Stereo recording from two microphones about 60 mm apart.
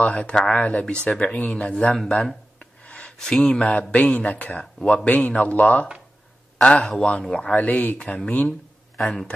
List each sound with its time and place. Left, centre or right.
0.0 s speech: left
2.0 s a sound: centre
3.9 s speech: left
7.6 s speech: left
8.9 s a man's voice: centre